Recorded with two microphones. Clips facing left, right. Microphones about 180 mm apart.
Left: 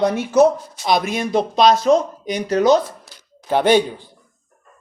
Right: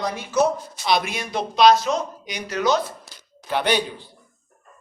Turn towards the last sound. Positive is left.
turn(degrees=50)  # may be behind; listen again after turning